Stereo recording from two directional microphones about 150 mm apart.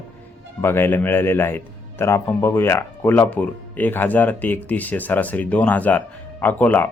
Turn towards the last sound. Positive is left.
turn(degrees=10)  # may be behind; listen again after turning